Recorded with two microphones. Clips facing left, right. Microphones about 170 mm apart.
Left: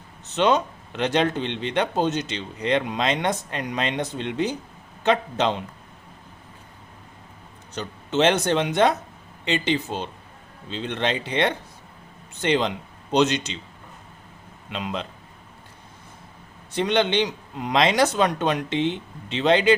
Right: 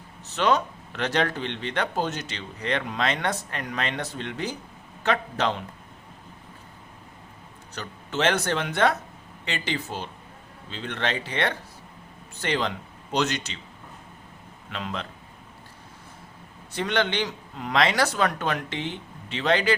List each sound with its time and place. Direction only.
0.3 s a man's voice: 20° left (ahead or behind)
7.7 s a man's voice: 20° left (ahead or behind)
14.7 s a man's voice: 20° left (ahead or behind)
16.7 s a man's voice: 20° left (ahead or behind)